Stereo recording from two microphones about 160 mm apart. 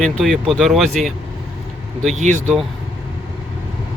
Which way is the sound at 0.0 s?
Centre (ahead or behind).